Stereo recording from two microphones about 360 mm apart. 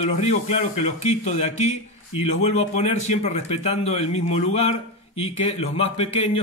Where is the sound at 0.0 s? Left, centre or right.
Centre.